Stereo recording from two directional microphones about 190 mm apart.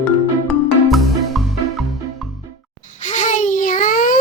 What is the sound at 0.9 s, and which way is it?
Music, centre (ahead or behind).